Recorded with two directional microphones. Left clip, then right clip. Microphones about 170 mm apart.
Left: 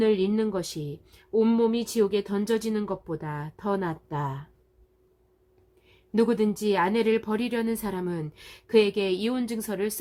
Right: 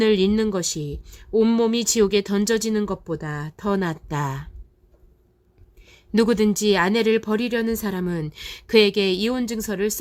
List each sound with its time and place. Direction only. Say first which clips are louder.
0.0 s speech: right 5 dB; 40° right (ahead or behind)
5.8 s speech: right 4 dB; 30° right (ahead or behind)